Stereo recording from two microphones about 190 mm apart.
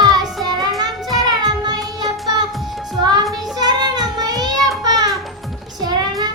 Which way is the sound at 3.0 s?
20° right (ahead or behind).